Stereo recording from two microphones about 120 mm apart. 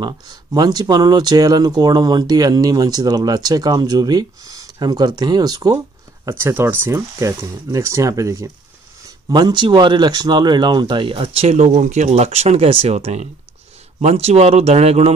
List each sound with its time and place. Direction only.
0.0 s speech: 35° right (ahead or behind)
6.2 s speech: 20° right (ahead or behind)
9.3 s speech: 40° right (ahead or behind); by 15.1 s 60° right (ahead or behind)